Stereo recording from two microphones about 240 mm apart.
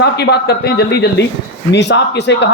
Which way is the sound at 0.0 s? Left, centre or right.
Left.